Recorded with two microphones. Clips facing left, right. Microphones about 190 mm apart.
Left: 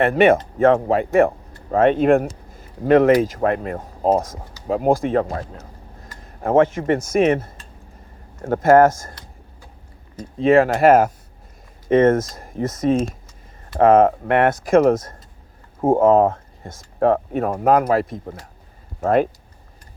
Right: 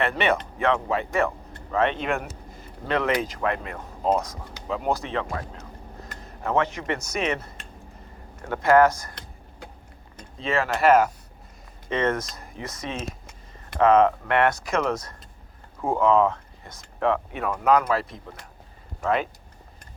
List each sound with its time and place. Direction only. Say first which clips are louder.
0.0 s speech: left 9 dB; 45° left (ahead or behind)
6.4 s speech: left 9 dB; 50° left (ahead or behind)
10.3 s speech: left 11 dB; 55° left (ahead or behind)